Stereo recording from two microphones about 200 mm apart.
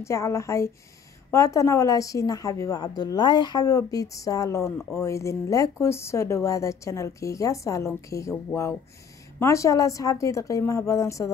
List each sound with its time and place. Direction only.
0.0 s speech: 15° left (ahead or behind)
9.4 s speech: 15° left (ahead or behind)